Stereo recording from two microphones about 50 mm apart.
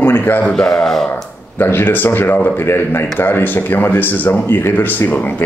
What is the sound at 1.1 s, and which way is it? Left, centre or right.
Speech, left.